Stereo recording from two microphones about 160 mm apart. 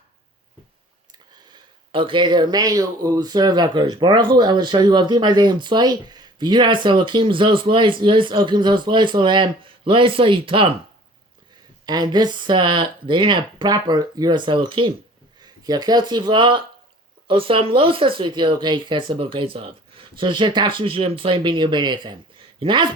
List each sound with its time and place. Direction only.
1.9 s speech: 30° right (ahead or behind)
11.9 s speech: 25° right (ahead or behind)